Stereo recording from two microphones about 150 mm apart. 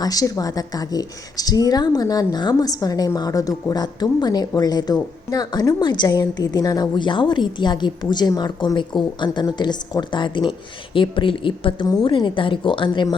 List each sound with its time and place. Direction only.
0.0 s a woman's voice: 25° left (ahead or behind)